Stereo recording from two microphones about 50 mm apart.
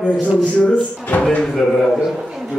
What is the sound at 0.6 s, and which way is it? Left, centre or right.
Speech, left.